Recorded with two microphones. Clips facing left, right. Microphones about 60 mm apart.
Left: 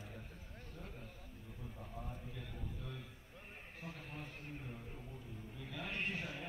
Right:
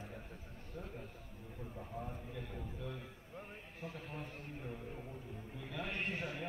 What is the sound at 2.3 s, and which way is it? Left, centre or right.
Speech, right.